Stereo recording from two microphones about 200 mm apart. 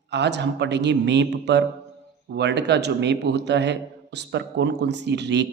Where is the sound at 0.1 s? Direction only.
60° right (ahead or behind).